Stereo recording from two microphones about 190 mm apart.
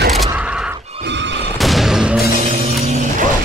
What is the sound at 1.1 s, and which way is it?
Neigh, 70° right (ahead or behind).